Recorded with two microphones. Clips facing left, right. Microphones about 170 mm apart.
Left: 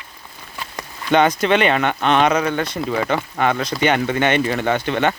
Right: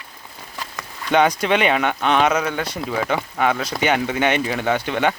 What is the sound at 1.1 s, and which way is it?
Speech, 10° right (ahead or behind).